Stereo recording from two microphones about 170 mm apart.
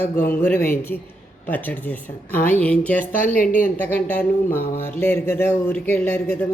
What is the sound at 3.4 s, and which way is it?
Speech, 50° left (ahead or behind).